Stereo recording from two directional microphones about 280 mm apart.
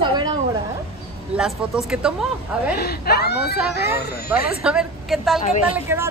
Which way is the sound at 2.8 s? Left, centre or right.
Left.